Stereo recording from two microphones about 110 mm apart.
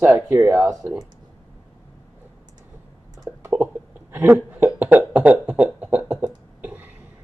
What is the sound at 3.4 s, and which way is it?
Cough, 15° right (ahead or behind).